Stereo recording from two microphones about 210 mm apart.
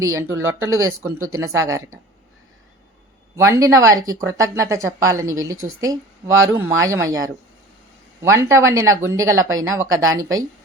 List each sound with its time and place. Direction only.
0.0 s speech: 15° right (ahead or behind)
3.3 s speech: 15° right (ahead or behind)